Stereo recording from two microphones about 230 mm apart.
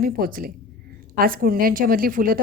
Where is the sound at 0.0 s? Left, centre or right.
Right.